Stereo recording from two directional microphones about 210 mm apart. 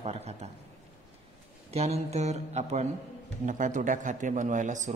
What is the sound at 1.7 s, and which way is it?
Speech, 30° right (ahead or behind).